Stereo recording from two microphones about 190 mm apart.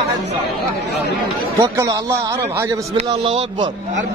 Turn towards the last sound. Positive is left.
turn(degrees=-25)  # may be behind; listen again after turning